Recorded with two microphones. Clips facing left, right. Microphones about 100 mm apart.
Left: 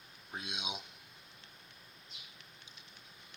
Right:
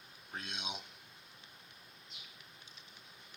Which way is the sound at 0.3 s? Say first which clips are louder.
Left 1 dB; 15° left (ahead or behind).